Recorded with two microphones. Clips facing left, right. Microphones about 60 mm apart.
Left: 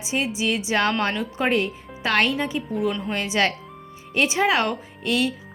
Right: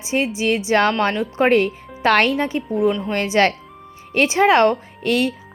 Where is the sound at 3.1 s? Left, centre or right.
Right.